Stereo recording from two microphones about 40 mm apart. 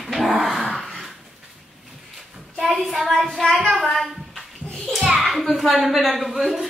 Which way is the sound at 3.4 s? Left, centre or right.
Centre.